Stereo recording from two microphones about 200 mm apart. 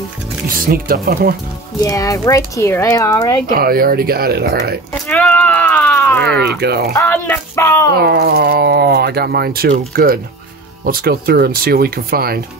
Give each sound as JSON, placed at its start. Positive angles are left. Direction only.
{"t": 0.6, "sound": "speech", "side_deg": -45}
{"t": 1.8, "sound": "speech", "side_deg": 15}
{"t": 3.5, "sound": "speech", "side_deg": -45}
{"t": 5.0, "sound": "a sound", "side_deg": 5}
{"t": 6.2, "sound": "speech", "side_deg": -55}
{"t": 6.9, "sound": "speech", "side_deg": 10}
{"t": 7.9, "sound": "speech", "side_deg": -50}